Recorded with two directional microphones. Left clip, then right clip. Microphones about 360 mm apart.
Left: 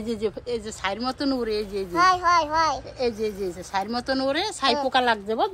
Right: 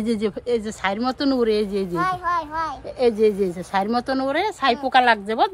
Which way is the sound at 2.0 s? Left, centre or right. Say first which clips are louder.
Left 5 dB; centre.